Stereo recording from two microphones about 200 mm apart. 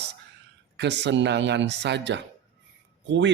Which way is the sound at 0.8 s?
60° right (ahead or behind).